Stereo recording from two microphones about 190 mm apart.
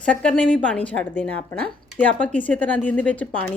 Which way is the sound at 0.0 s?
5° left (ahead or behind).